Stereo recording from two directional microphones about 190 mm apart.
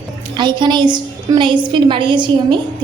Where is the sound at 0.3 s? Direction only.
25° right (ahead or behind).